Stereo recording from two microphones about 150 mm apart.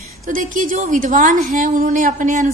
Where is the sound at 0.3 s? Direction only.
60° right (ahead or behind).